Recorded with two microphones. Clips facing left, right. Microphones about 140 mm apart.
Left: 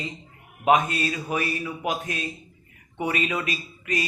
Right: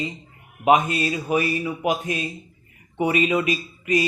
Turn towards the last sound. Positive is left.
turn(degrees=-15)  # may be behind; listen again after turning